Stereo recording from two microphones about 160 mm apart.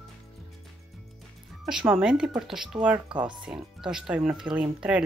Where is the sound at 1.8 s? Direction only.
5° right (ahead or behind).